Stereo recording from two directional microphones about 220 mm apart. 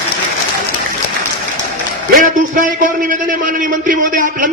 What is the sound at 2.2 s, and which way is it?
A man's voice, 35° right (ahead or behind).